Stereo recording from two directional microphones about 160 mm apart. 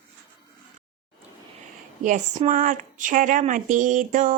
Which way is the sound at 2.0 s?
50° right (ahead or behind).